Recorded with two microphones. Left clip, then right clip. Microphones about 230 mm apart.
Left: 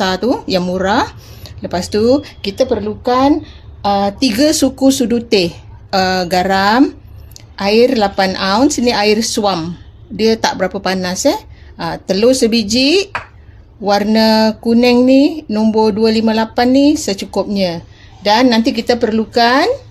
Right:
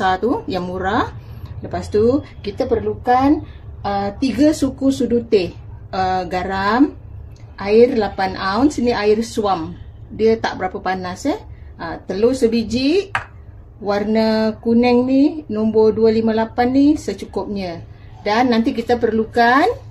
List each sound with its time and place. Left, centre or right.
0.0 s a woman's voice: left
3.8 s a woman's voice: left